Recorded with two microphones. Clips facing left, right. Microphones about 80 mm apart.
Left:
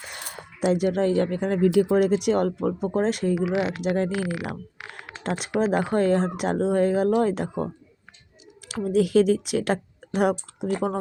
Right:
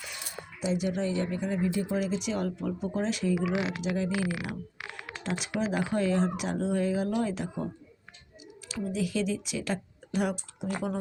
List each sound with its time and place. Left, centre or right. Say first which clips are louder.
0.0 s speech: left 3 dB; left
1.6 s speech: left 13 dB; left
1.9 s speech: left 10 dB; left